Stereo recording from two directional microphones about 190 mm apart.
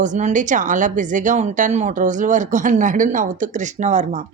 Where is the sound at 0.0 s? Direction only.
40° right (ahead or behind).